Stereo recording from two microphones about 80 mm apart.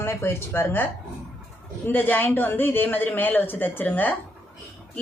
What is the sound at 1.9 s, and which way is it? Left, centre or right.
Speech, left.